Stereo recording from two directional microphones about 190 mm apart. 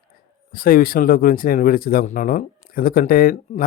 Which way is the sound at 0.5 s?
50° left (ahead or behind).